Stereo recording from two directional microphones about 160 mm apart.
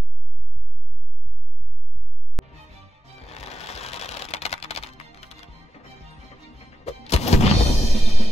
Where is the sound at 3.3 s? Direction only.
40° left (ahead or behind).